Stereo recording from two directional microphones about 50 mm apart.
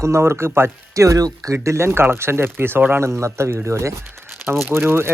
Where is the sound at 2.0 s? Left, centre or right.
Right.